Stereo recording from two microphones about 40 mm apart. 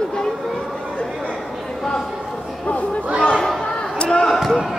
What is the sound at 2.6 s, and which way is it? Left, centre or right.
Speech, left.